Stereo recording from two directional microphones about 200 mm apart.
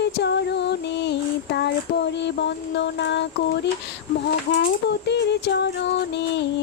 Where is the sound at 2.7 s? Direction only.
60° left (ahead or behind).